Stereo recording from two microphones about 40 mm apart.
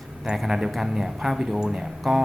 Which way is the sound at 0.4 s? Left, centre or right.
Centre.